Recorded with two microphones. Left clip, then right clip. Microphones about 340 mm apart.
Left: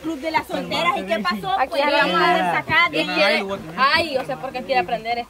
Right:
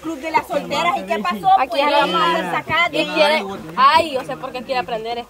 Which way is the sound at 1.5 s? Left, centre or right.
Right.